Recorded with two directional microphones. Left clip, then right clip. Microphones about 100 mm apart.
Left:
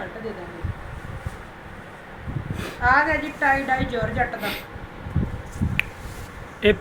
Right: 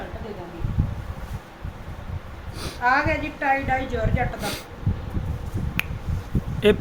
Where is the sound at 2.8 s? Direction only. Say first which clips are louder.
Left 2 dB; 45° right (ahead or behind).